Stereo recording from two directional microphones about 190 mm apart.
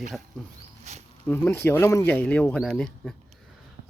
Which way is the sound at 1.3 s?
10° left (ahead or behind).